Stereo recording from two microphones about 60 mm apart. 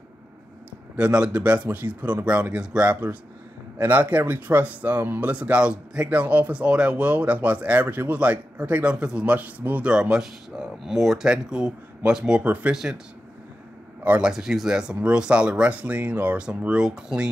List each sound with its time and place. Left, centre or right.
0.9 s speech: centre
3.7 s speech: right
5.3 s speech: right
9.8 s speech: centre
14.2 s speech: centre; by 16.3 s right
16.3 s speech: centre